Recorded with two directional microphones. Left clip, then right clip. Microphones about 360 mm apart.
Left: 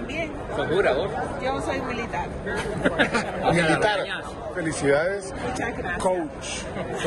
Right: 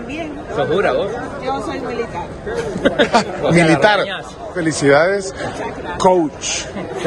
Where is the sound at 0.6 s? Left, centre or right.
Right.